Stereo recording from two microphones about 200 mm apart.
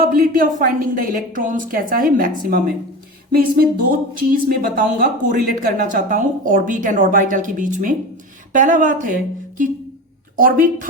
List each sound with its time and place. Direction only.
0.0 s a woman's voice: 45° right (ahead or behind)